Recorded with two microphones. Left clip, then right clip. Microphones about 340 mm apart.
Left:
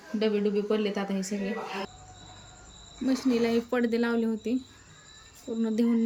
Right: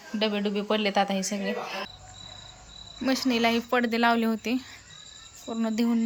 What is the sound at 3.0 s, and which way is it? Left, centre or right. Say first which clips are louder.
Speech: right 2 dB; centre.